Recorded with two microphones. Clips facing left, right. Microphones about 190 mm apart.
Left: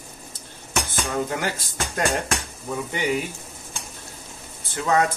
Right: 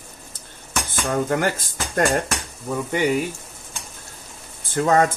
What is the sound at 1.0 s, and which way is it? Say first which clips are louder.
Speech: right 7 dB; 50° right (ahead or behind).